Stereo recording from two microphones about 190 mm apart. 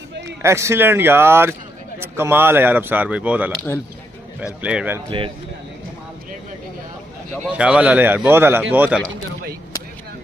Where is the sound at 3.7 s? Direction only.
10° left (ahead or behind).